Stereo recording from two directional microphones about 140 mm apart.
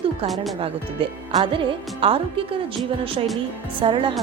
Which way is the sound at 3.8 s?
40° right (ahead or behind).